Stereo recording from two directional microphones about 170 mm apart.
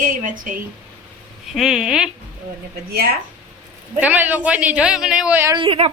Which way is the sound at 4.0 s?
10° right (ahead or behind).